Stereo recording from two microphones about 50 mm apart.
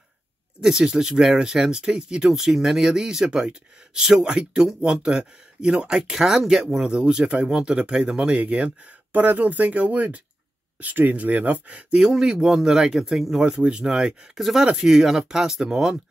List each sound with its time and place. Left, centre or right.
0.6 s speech: centre